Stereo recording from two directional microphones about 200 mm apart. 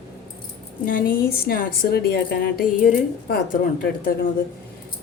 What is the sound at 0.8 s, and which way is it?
A woman's voice, 45° left (ahead or behind).